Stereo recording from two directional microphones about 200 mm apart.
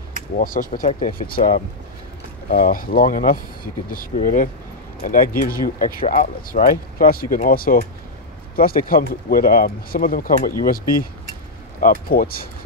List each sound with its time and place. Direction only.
0.4 s speech: 45° left (ahead or behind)
11.8 s speech: 45° left (ahead or behind)